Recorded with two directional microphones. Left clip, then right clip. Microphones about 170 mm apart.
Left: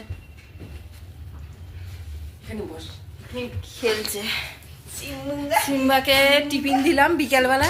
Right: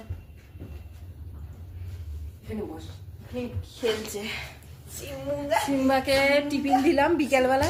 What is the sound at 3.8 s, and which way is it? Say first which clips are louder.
Speech: left 4 dB; 5° left (ahead or behind).